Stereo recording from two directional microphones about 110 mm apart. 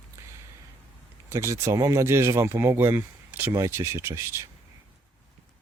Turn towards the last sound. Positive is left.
turn(degrees=-25)  # may be behind; listen again after turning